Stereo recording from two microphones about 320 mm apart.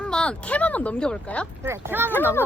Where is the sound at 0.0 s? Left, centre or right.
Centre.